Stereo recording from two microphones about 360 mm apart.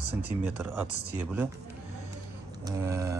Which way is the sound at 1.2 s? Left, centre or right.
Centre.